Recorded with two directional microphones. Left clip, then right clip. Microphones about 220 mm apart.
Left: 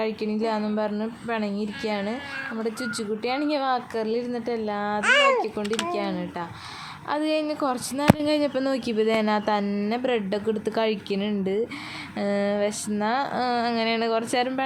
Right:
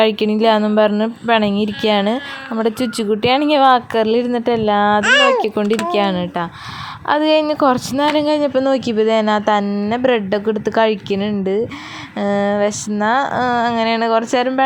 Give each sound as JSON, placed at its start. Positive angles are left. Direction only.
{"t": 0.0, "sound": "speech", "side_deg": -35}
{"t": 5.0, "sound": "speech", "side_deg": -20}
{"t": 5.4, "sound": "speech", "side_deg": -35}
{"t": 8.2, "sound": "speech", "side_deg": -15}
{"t": 9.9, "sound": "speech", "side_deg": -20}